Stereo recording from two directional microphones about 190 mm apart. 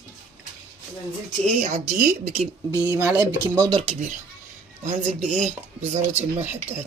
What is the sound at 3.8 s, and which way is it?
Speech, 40° right (ahead or behind).